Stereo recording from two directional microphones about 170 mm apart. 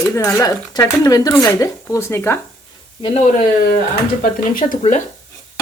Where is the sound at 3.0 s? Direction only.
40° left (ahead or behind).